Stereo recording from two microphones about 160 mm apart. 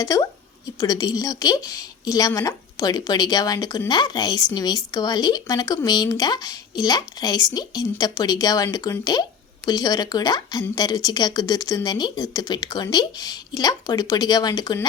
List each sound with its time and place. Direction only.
0.0 s a woman's voice: 20° left (ahead or behind)